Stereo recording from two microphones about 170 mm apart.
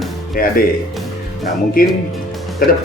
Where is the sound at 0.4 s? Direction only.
55° left (ahead or behind).